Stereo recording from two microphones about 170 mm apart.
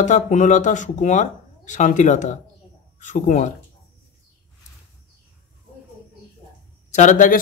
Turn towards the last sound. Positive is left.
turn(degrees=50)  # may be behind; listen again after turning